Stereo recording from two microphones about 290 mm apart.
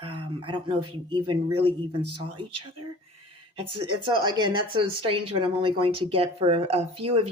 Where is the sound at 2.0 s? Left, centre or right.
Right.